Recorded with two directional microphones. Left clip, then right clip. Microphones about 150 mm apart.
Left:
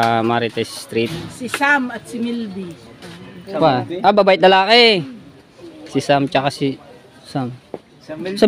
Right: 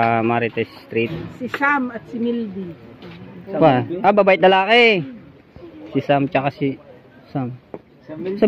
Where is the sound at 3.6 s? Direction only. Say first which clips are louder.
Right 1 dB; centre (ahead or behind).